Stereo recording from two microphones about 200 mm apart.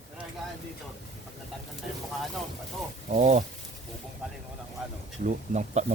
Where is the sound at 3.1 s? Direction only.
35° right (ahead or behind).